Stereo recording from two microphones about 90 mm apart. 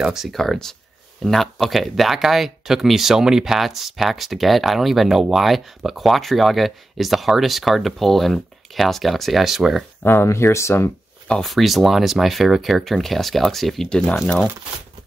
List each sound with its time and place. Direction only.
0.0 s speech: 5° right (ahead or behind)
10.0 s speech: 30° left (ahead or behind)
11.2 s speech: 5° left (ahead or behind)